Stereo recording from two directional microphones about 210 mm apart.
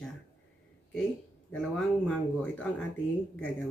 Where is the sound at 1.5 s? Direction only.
5° left (ahead or behind).